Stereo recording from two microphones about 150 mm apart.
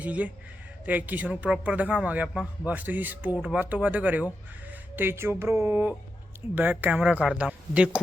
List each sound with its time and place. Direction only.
0.0 s speech: 10° right (ahead or behind)